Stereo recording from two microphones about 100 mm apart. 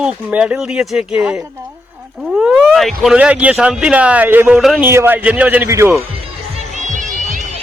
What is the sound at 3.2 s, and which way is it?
A man's voice, 15° right (ahead or behind).